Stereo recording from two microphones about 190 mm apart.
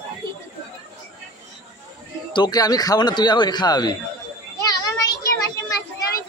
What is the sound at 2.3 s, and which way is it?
A man's voice, 20° left (ahead or behind).